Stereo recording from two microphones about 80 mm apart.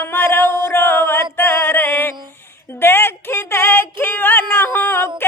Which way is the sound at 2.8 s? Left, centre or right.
Left.